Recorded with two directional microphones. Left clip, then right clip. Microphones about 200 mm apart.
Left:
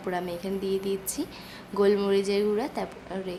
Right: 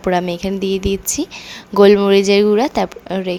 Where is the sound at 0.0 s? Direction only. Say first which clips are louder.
Right 13 dB; 45° right (ahead or behind).